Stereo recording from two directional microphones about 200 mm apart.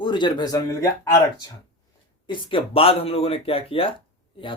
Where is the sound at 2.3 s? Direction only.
25° left (ahead or behind).